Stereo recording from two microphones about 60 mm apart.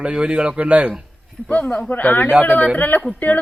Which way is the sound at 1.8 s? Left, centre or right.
Left.